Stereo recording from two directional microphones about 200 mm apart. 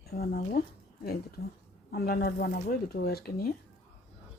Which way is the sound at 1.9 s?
50° left (ahead or behind).